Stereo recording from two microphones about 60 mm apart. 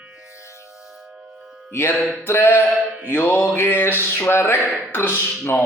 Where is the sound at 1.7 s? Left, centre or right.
Left.